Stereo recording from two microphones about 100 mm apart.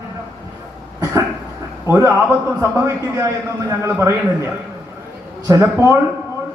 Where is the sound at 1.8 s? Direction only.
30° right (ahead or behind).